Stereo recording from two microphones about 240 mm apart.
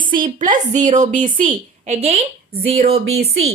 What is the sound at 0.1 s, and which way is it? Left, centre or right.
A woman's voice, right.